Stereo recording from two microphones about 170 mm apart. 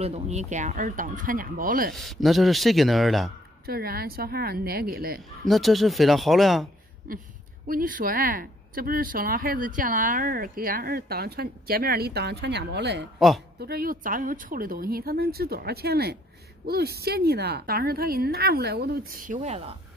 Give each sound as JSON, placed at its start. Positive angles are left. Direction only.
{"t": 0.0, "sound": "speech", "side_deg": -40}
{"t": 2.0, "sound": "speech", "side_deg": 0}
{"t": 3.6, "sound": "speech", "side_deg": -60}
{"t": 5.4, "sound": "speech", "side_deg": 0}
{"t": 7.1, "sound": "speech", "side_deg": -55}
{"t": 13.6, "sound": "speech", "side_deg": -60}